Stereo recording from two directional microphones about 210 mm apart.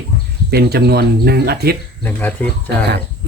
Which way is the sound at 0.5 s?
50° right (ahead or behind).